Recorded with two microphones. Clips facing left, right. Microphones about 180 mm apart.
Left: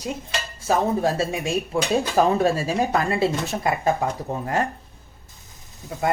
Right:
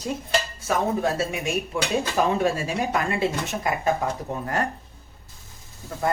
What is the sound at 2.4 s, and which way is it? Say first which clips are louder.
Speech: left 3 dB; 35° left (ahead or behind).